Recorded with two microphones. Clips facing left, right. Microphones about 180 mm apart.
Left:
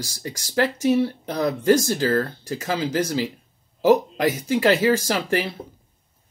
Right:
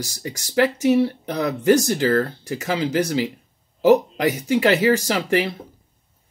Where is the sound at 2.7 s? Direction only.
70° right (ahead or behind).